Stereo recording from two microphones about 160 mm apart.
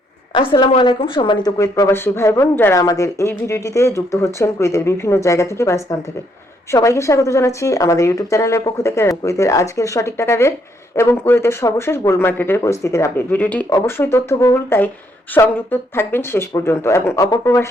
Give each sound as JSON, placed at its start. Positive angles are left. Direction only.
{"t": 0.3, "sound": "a woman's voice", "side_deg": 30}